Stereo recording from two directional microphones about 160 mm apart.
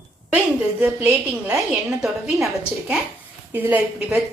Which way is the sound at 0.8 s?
10° right (ahead or behind).